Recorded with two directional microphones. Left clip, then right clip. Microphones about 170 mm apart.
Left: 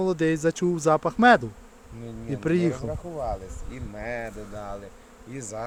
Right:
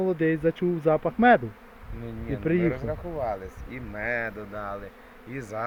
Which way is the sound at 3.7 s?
10° left (ahead or behind).